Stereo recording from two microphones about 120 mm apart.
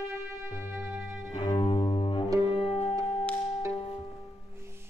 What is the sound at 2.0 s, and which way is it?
Double bass, 45° left (ahead or behind).